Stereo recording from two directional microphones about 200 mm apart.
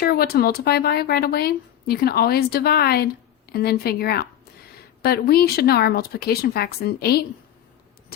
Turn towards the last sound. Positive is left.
turn(degrees=50)  # may be behind; listen again after turning